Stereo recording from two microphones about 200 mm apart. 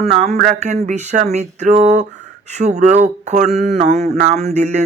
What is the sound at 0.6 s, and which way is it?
Speech, 35° right (ahead or behind).